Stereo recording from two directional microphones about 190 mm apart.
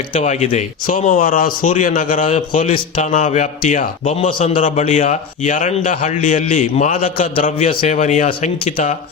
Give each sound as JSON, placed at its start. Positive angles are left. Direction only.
{"t": 0.1, "sound": "a man's voice", "side_deg": 40}
{"t": 4.3, "sound": "a man's voice", "side_deg": 30}
{"t": 4.5, "sound": "a man's voice", "side_deg": 40}
{"t": 7.7, "sound": "a man's voice", "side_deg": 30}
{"t": 7.9, "sound": "a man's voice", "side_deg": 40}